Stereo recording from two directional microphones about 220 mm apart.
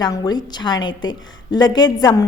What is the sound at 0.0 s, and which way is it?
A woman's voice, 20° left (ahead or behind).